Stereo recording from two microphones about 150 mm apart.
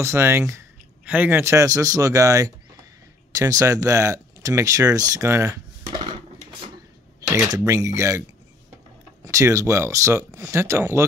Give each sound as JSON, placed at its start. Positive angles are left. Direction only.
{"t": 0.0, "sound": "speech", "side_deg": -15}
{"t": 7.2, "sound": "speech", "side_deg": -20}
{"t": 9.2, "sound": "speech", "side_deg": -20}